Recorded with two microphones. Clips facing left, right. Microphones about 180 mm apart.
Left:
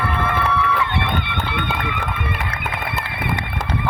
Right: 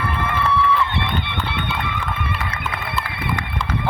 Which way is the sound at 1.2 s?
55° left (ahead or behind).